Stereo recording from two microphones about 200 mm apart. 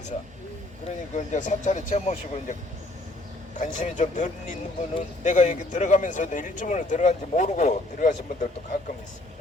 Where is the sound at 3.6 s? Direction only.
40° left (ahead or behind).